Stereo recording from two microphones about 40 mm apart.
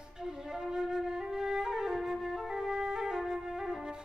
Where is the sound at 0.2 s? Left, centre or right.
Centre.